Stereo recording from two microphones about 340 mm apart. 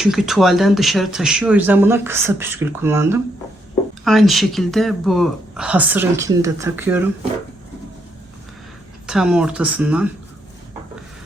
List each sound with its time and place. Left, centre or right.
0.0 s speech: centre
9.0 s speech: centre